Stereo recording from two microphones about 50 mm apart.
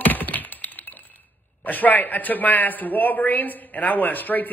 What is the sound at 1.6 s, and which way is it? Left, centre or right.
A man's voice, left.